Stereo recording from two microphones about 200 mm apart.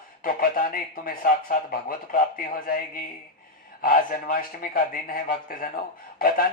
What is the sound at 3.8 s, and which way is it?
Speech, 45° left (ahead or behind).